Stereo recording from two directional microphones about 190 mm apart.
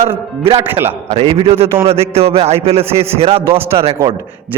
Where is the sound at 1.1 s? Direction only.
30° right (ahead or behind).